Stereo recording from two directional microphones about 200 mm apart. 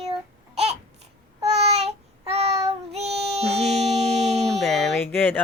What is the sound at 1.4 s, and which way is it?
Child singing, 30° right (ahead or behind).